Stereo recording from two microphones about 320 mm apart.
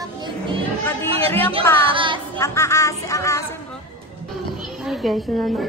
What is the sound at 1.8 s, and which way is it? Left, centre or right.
Speech, centre.